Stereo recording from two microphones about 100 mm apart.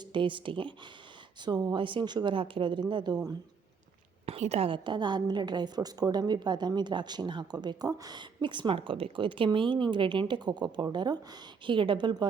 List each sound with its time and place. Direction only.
0.1 s speech: 55° right (ahead or behind)
1.5 s a woman's voice: 45° right (ahead or behind)
4.3 s a woman's voice: 90° right; by 12.3 s 50° right (ahead or behind)